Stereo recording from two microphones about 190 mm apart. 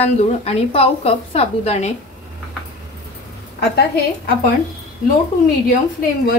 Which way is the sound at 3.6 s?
55° left (ahead or behind).